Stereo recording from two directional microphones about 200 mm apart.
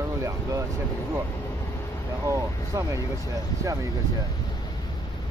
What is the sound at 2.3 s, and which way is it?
Speech, 15° right (ahead or behind).